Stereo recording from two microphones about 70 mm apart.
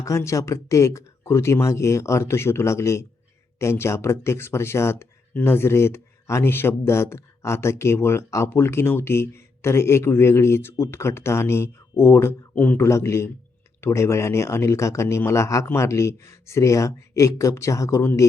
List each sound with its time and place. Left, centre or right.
0.0 s speech: left
12.5 s speech: left
12.8 s speech: left